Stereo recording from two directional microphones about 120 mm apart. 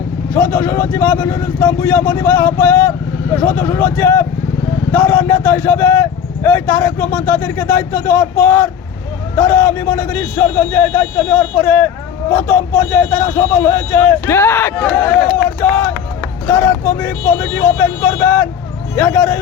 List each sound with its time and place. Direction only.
0.3 s speech: 15° left (ahead or behind)